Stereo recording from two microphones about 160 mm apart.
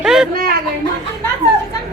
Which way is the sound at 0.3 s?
70° right (ahead or behind).